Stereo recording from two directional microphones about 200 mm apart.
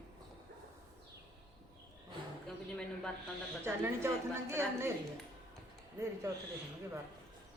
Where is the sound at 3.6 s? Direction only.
10° right (ahead or behind).